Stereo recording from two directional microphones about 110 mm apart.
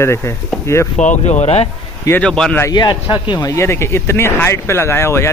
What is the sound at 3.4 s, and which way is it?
Speech, 25° left (ahead or behind).